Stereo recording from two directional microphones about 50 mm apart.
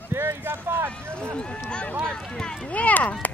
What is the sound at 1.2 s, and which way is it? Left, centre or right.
Speech, centre.